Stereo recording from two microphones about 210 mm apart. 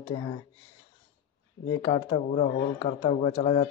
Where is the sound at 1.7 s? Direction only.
20° left (ahead or behind).